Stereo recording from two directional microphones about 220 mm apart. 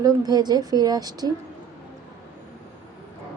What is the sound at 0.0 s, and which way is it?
A woman's voice, 15° right (ahead or behind).